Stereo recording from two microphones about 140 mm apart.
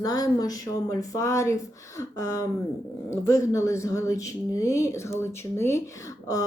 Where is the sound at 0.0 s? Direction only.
25° left (ahead or behind).